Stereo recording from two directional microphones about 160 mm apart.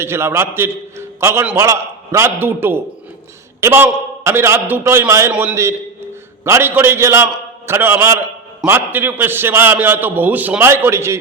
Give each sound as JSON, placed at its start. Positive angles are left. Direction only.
{"t": 0.0, "sound": "a man's voice", "side_deg": -15}